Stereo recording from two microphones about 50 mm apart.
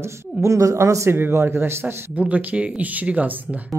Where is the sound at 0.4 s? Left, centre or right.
Right.